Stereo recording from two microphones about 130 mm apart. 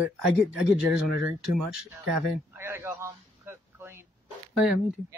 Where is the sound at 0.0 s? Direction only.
5° right (ahead or behind).